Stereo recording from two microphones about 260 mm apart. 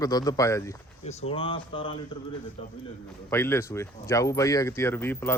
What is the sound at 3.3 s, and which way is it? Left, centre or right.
A man's voice, centre.